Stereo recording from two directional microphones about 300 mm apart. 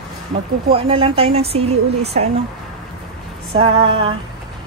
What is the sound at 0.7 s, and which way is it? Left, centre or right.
Speech, centre.